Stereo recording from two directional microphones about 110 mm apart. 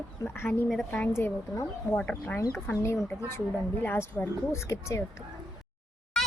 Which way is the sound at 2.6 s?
25° left (ahead or behind).